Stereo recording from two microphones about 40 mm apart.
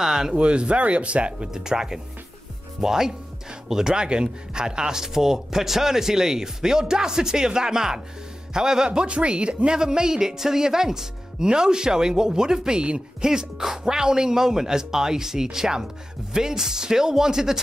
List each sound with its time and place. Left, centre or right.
0.0 s speech: centre
0.4 s speech: right
1.5 s a man's voice: centre